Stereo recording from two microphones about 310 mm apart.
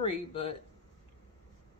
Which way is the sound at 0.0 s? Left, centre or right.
Centre.